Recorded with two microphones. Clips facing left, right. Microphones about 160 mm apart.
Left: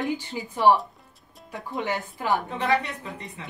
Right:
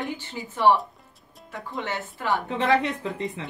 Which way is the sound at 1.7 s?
15° left (ahead or behind).